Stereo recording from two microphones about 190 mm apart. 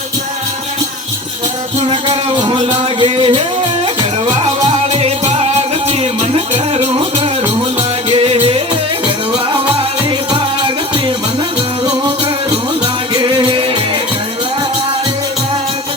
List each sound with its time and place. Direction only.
1.9 s music: 30° right (ahead or behind)
12.8 s music: 25° right (ahead or behind)